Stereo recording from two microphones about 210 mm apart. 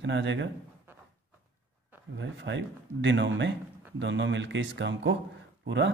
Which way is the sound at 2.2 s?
60° right (ahead or behind).